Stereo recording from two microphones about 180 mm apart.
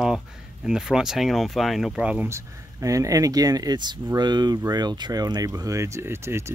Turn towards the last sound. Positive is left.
turn(degrees=-15)  # may be behind; listen again after turning